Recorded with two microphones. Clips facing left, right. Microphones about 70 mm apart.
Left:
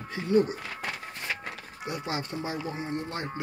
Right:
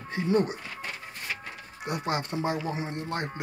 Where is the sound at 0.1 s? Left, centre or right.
Right.